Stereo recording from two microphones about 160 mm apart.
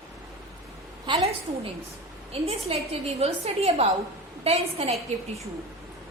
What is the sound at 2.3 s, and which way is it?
A woman's voice, 40° right (ahead or behind).